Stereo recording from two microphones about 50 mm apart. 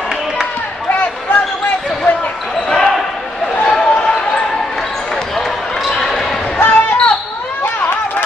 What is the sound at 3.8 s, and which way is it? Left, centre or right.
Basketball bounce, left.